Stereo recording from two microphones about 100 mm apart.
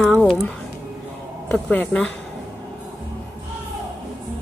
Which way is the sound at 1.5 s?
10° left (ahead or behind).